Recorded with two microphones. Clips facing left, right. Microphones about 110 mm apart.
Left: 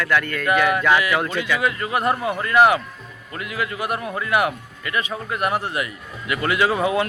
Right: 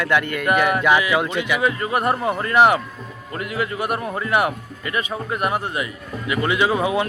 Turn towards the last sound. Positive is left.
turn(degrees=-20)  # may be behind; listen again after turning